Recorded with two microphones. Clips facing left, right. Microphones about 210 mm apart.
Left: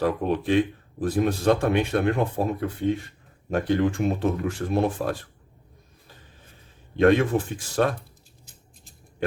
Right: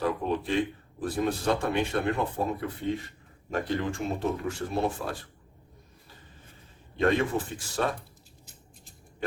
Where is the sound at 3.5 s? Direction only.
60° left (ahead or behind).